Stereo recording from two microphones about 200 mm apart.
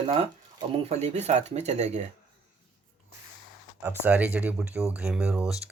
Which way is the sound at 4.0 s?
10° right (ahead or behind).